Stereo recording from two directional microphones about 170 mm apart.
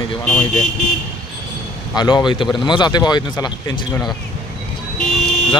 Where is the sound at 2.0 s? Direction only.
25° left (ahead or behind).